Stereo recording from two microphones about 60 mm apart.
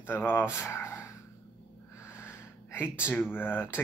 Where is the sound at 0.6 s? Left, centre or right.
Left.